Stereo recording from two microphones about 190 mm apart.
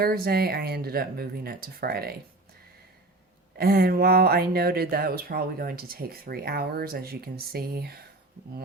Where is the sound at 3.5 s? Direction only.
55° right (ahead or behind).